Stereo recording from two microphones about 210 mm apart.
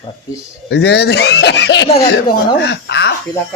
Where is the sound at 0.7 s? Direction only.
50° left (ahead or behind).